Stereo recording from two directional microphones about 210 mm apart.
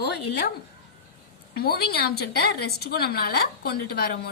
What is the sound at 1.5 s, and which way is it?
A woman's voice, 45° left (ahead or behind).